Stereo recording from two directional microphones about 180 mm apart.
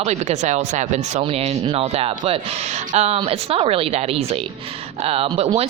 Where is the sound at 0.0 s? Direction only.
40° right (ahead or behind).